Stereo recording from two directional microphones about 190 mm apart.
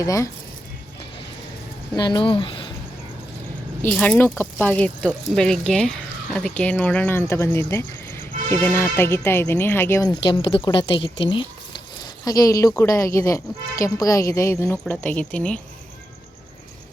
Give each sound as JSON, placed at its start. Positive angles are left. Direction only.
{"t": 0.0, "sound": "speech", "side_deg": 15}
{"t": 2.0, "sound": "speech", "side_deg": 25}
{"t": 3.8, "sound": "speech", "side_deg": 5}